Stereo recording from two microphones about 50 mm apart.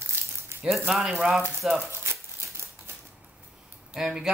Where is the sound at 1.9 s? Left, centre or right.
Right.